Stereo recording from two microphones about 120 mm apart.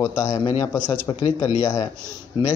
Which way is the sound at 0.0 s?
25° left (ahead or behind).